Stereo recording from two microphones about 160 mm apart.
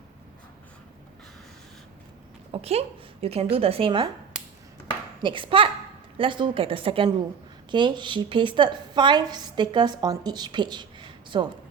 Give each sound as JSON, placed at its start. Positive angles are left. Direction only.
{"t": 2.5, "sound": "a woman's voice", "side_deg": -40}
{"t": 5.2, "sound": "a woman's voice", "side_deg": -30}